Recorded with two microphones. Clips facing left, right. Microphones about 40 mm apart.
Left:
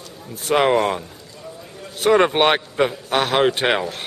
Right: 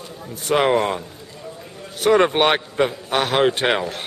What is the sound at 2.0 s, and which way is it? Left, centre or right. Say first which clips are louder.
Speech: even; centre.